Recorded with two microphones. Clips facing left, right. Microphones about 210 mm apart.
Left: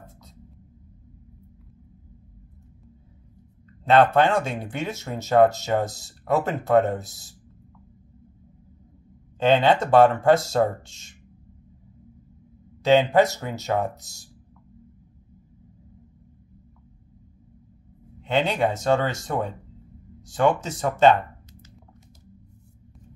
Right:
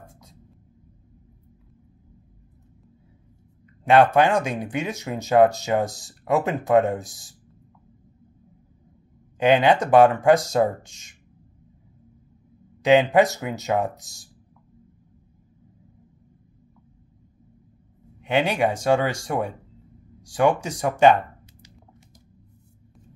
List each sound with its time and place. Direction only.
0.0 s a sound: 15° right (ahead or behind)
3.8 s speech: 15° right (ahead or behind)
9.4 s speech: 15° right (ahead or behind)
12.8 s speech: 15° right (ahead or behind)
18.2 s speech: 15° right (ahead or behind)